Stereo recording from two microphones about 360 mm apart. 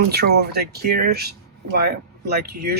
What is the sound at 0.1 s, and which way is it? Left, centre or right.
Speech, right.